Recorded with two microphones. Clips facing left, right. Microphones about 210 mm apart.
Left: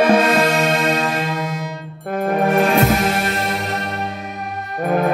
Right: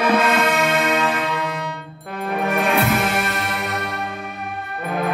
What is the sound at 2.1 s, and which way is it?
Music, 50° left (ahead or behind).